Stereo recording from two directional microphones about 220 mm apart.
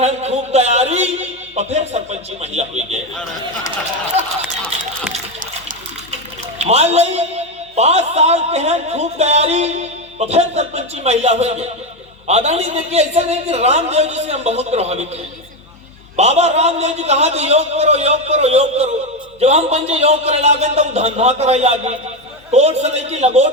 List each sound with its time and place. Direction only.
0.0 s a sound: 30° right (ahead or behind)
1.5 s speech: 30° right (ahead or behind)
4.1 s run: 30° right (ahead or behind)
6.6 s speech: 30° right (ahead or behind)
16.1 s speech: 30° right (ahead or behind)